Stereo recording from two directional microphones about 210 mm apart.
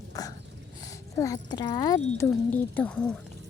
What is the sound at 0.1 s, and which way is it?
Dog, 15° left (ahead or behind).